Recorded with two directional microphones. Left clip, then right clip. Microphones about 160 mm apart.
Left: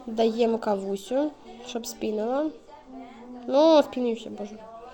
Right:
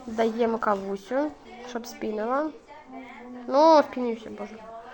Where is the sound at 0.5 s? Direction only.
20° left (ahead or behind).